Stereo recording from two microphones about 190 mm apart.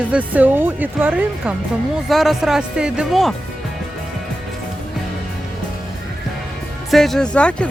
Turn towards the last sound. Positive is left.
turn(degrees=5)  # may be behind; listen again after turning